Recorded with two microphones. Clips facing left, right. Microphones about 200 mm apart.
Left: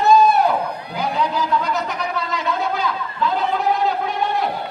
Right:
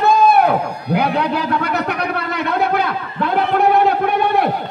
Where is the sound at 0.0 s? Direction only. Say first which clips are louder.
Right 1 dB; 60° right (ahead or behind).